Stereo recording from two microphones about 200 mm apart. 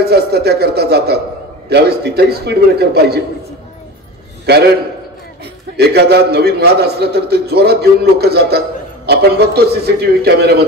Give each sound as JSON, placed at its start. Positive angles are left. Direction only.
{"t": 0.0, "sound": "a man's voice", "side_deg": -55}
{"t": 5.8, "sound": "a man's voice", "side_deg": -55}